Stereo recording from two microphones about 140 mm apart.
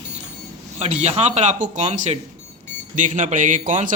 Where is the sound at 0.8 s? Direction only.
50° right (ahead or behind); by 3.9 s 70° right (ahead or behind).